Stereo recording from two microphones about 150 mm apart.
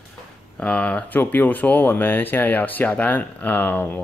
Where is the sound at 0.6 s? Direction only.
10° left (ahead or behind).